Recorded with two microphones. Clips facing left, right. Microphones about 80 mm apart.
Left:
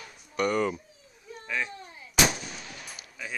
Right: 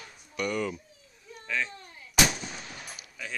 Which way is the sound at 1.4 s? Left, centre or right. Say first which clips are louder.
Even; centre.